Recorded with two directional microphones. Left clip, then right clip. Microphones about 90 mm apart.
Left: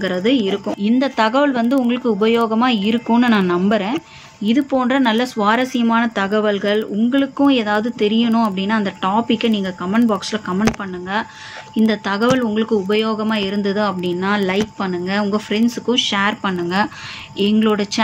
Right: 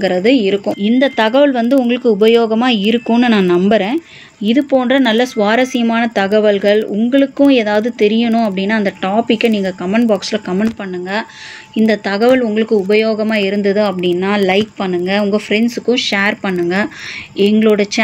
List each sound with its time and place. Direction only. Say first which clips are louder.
0.0 s speech: right 6 dB; 50° right (ahead or behind)
0.7 s speech: right 4 dB; 25° right (ahead or behind); by 4.0 s 50° right (ahead or behind)
4.4 s speech: right 4 dB; 35° right (ahead or behind)
11.7 s speech: right 4 dB; 40° right (ahead or behind)